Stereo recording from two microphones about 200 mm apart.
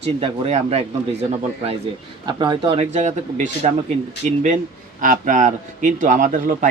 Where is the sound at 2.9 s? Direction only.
35° right (ahead or behind).